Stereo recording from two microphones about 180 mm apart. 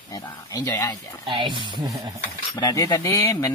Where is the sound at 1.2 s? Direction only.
25° right (ahead or behind).